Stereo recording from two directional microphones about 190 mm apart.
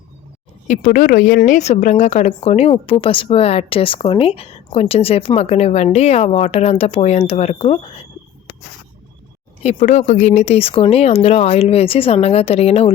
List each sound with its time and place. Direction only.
0.7 s a woman's voice: 45° left (ahead or behind)
9.6 s a woman's voice: 35° left (ahead or behind)